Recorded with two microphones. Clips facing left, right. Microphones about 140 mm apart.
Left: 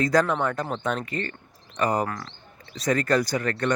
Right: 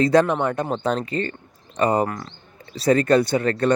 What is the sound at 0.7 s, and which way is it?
Speech, 35° right (ahead or behind).